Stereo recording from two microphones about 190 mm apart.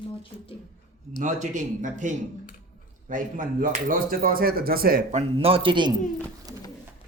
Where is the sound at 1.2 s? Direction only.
40° right (ahead or behind); by 5.9 s 25° right (ahead or behind).